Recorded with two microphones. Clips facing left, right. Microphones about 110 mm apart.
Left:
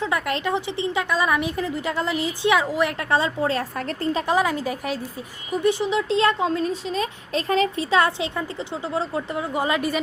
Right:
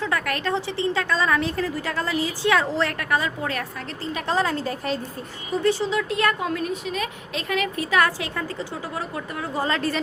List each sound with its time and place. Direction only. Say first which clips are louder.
0.0 s a woman's voice: left 1 dB; 20° left (ahead or behind)
3.0 s a woman's voice: left 3 dB; 25° left (ahead or behind)
3.8 s a woman's voice: left 6 dB; 45° left (ahead or behind)
4.3 s a woman's voice: right 1 dB; 15° left (ahead or behind)